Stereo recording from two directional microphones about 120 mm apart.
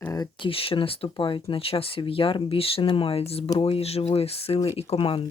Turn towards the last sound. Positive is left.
turn(degrees=50)  # may be behind; listen again after turning